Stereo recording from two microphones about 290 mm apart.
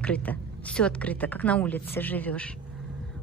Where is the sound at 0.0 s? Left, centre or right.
Centre.